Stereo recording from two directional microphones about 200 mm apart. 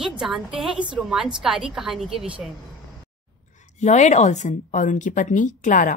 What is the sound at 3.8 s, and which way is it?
A woman's voice, 35° left (ahead or behind).